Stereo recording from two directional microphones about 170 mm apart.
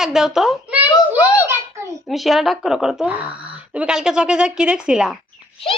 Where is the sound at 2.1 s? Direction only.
Centre (ahead or behind).